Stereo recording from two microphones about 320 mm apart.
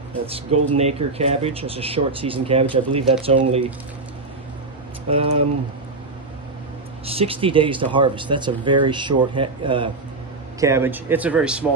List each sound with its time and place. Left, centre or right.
0.5 s speech: right
0.7 s speech: centre
5.1 s speech: centre
7.1 s a man's voice: centre